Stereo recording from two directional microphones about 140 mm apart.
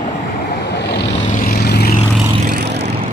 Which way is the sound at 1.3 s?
90° left.